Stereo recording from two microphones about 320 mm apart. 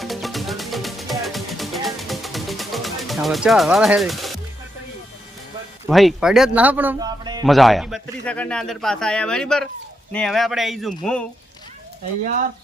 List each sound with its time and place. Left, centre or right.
0.0 s music: centre
5.9 s a man's voice: centre
7.4 s a man's voice: centre
12.2 s speech: right